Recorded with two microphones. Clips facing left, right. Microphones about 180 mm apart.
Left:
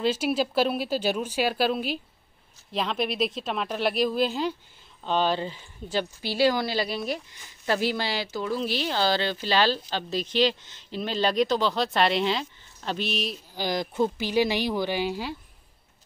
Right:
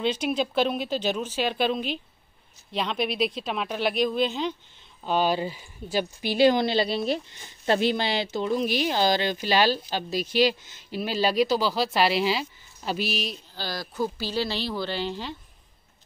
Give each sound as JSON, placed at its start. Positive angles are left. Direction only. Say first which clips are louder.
{"t": 0.0, "sound": "speech", "louder": "left 1 dB", "side_deg": 5}
{"t": 5.0, "sound": "speech", "louder": "right 1 dB", "side_deg": -10}
{"t": 13.6, "sound": "speech", "louder": "left 4 dB", "side_deg": 20}